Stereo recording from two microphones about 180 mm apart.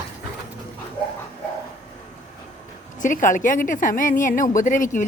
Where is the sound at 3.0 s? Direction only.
45° left (ahead or behind).